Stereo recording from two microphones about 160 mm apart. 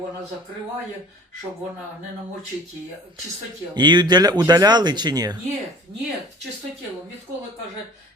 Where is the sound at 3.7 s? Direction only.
25° right (ahead or behind).